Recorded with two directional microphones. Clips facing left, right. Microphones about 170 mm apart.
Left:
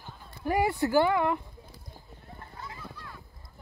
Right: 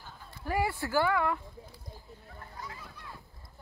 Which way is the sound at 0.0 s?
20° left (ahead or behind).